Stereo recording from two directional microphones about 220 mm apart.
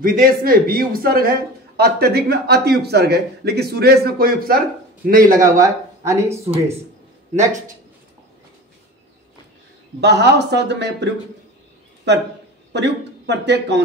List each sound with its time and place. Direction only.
0.0 s a man's voice: 40° right (ahead or behind)
5.4 s speech: 15° right (ahead or behind)
9.9 s a man's voice: 50° right (ahead or behind)
12.7 s speech: 50° right (ahead or behind)